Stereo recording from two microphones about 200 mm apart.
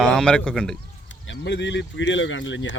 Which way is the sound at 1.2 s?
60° left (ahead or behind).